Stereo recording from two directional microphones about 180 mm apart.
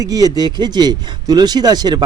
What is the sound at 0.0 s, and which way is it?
A man's voice, 20° right (ahead or behind).